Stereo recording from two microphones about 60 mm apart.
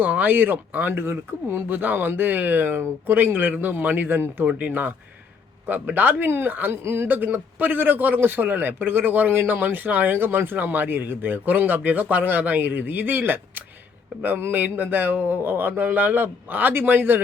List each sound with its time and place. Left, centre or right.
0.0 s a man's voice: right
6.8 s speech: right
7.1 s a man's voice: right